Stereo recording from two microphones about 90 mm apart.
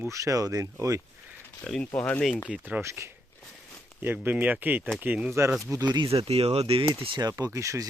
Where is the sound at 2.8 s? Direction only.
30° right (ahead or behind).